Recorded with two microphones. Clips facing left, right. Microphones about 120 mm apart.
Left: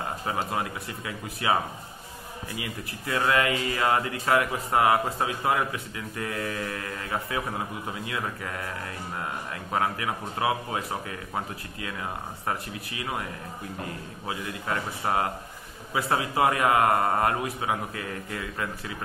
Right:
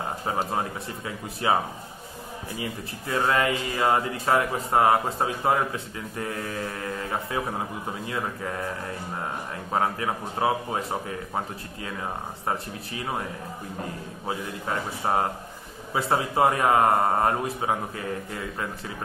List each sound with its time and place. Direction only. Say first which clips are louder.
0.3 s speech: right 2 dB; 30° right (ahead or behind)
2.6 s speech: right 4 dB; 25° right (ahead or behind)
9.7 s speech: right 2 dB; 30° right (ahead or behind)
14.7 s speech: right 2 dB; 25° right (ahead or behind)